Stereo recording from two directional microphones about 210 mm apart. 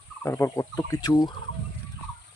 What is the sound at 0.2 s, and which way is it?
Turkey, 10° left (ahead or behind).